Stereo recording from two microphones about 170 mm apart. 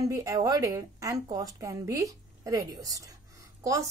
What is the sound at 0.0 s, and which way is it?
Speech, 20° right (ahead or behind).